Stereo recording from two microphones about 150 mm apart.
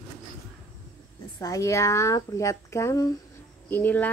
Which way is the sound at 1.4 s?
20° left (ahead or behind).